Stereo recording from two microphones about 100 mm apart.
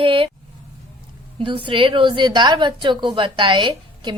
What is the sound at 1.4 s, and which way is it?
Speech, 60° right (ahead or behind).